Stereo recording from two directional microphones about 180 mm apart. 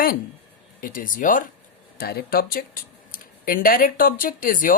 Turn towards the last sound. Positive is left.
turn(degrees=50)  # may be behind; listen again after turning